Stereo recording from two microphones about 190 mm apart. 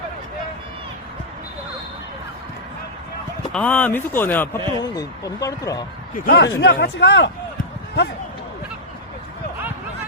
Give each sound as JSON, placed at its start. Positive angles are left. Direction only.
{"t": 3.5, "sound": "speech", "side_deg": 5}
{"t": 6.1, "sound": "speech", "side_deg": 55}